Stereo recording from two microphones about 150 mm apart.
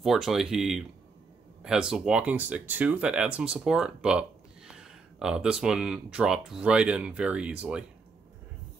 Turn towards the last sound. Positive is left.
turn(degrees=-5)  # may be behind; listen again after turning